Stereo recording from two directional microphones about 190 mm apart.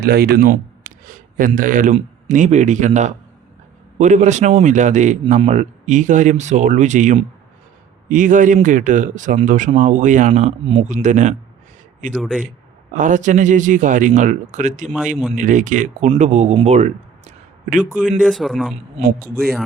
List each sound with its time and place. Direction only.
0.0 s a man's voice: 55° right (ahead or behind)
12.1 s speech: centre (ahead or behind)
12.9 s a man's voice: 40° right (ahead or behind)
18.2 s speech: centre (ahead or behind)